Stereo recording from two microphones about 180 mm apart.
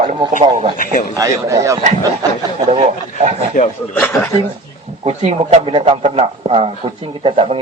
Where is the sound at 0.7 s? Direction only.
50° left (ahead or behind).